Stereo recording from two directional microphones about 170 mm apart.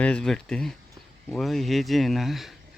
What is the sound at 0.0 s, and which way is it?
Speech, 5° left (ahead or behind).